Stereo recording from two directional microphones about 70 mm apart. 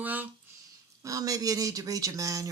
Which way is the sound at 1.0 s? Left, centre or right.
Right.